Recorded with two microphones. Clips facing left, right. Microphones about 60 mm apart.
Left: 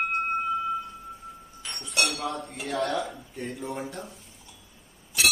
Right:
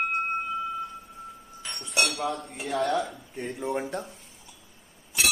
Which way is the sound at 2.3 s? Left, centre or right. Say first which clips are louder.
Right 1 dB; centre.